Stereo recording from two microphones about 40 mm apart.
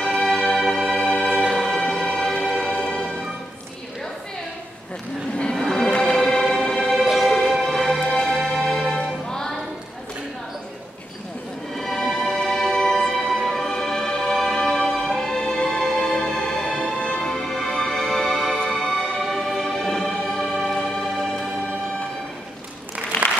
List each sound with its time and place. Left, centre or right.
0.0 s music: centre
1.8 s music: centre
5.6 s music: centre
5.9 s music: left
6.1 s music: centre
7.0 s music: centre
8.9 s music: centre
11.8 s music: centre
16.3 s music: centre
19.3 s music: centre
20.1 s music: centre
20.7 s music: centre